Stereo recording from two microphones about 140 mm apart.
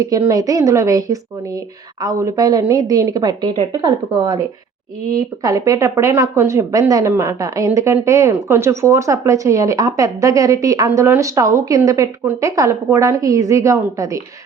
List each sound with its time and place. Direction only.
0.0 s speech: 25° right (ahead or behind)
5.4 s speech: 25° right (ahead or behind)